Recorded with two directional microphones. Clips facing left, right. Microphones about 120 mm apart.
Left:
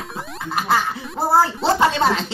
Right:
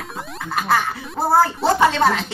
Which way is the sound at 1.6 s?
25° left (ahead or behind).